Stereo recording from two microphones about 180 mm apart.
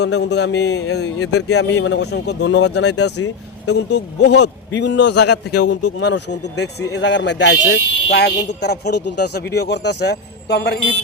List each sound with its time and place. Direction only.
0.0 s a man's voice: 70° left (ahead or behind)